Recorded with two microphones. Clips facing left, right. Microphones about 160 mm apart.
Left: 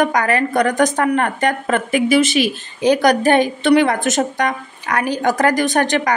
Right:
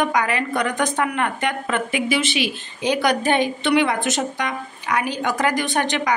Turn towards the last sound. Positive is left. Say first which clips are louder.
# left 5 dB
turn(degrees=45)  # may be behind; listen again after turning